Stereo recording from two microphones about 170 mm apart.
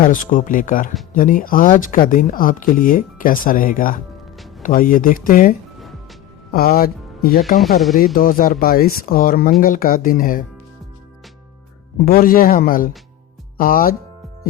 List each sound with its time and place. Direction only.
0.0 s speech: 50° left (ahead or behind)
12.0 s speech: 55° left (ahead or behind)